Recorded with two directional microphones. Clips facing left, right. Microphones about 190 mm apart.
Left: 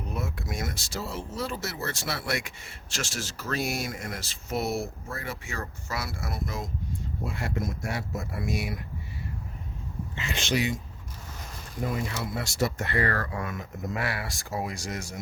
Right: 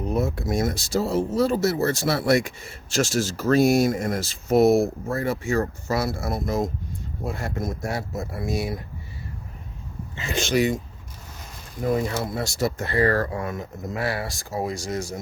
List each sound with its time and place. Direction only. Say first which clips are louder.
0.0 s speech: right 10 dB; 40° right (ahead or behind)
10.2 s speech: right 6 dB; 45° right (ahead or behind)
12.0 s speech: right 6 dB; 40° right (ahead or behind)